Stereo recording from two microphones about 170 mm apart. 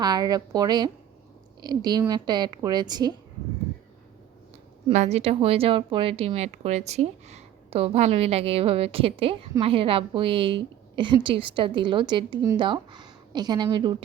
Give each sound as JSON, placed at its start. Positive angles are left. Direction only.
{"t": 0.0, "sound": "a woman's voice", "side_deg": -25}
{"t": 4.9, "sound": "a woman's voice", "side_deg": -40}